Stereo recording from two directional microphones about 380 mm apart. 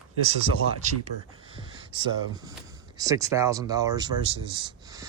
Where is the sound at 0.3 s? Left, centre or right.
Centre.